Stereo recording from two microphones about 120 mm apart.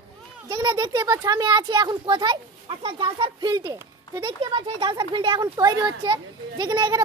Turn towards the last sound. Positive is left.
turn(degrees=-35)  # may be behind; listen again after turning